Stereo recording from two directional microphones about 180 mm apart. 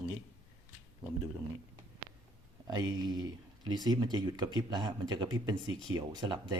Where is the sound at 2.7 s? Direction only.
20° right (ahead or behind).